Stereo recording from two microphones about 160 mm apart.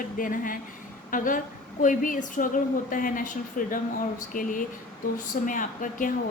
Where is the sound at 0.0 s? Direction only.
60° left (ahead or behind).